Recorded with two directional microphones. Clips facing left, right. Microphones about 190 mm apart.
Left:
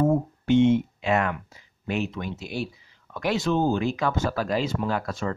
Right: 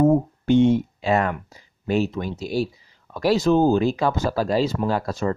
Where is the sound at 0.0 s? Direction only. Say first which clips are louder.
Right 5 dB; 40° right (ahead or behind).